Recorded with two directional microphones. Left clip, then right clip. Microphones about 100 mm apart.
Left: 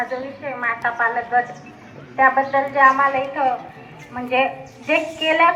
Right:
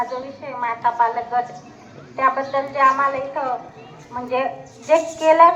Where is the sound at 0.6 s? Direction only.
55° right (ahead or behind).